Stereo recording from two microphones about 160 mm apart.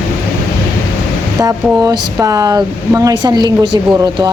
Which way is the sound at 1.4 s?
25° right (ahead or behind).